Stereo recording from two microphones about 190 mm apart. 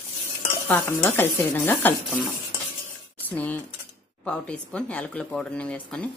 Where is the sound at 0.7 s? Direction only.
10° left (ahead or behind).